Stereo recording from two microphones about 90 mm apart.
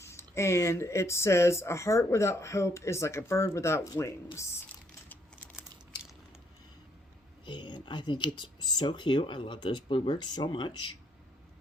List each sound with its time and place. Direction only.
0.0 s speech: 30° left (ahead or behind)
7.4 s speech: 60° left (ahead or behind)